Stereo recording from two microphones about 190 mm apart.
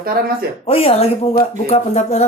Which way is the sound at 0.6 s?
30° left (ahead or behind).